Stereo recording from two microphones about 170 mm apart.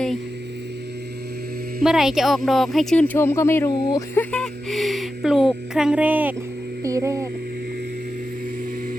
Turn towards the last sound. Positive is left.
turn(degrees=-20)  # may be behind; listen again after turning